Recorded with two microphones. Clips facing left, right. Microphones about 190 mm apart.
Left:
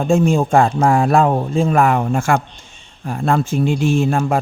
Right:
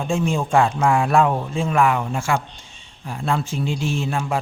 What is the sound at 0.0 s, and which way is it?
A man's voice, 45° left (ahead or behind).